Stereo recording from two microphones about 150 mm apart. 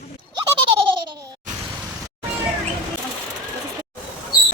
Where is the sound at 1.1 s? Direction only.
25° right (ahead or behind).